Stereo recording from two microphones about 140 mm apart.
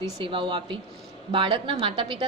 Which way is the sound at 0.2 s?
40° right (ahead or behind).